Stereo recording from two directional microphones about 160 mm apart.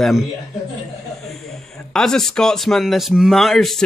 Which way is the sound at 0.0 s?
Centre (ahead or behind).